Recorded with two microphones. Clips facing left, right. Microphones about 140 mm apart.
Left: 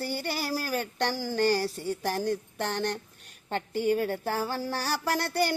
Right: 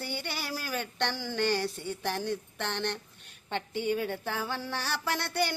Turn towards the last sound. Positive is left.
turn(degrees=40)  # may be behind; listen again after turning